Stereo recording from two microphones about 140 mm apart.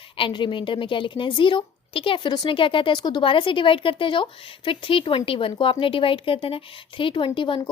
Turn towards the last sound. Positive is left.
turn(degrees=35)  # may be behind; listen again after turning